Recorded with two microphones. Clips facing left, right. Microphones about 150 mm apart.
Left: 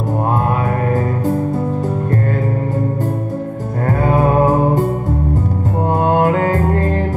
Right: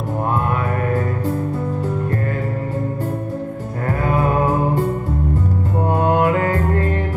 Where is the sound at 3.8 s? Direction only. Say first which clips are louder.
Left 4 dB; 35° left (ahead or behind).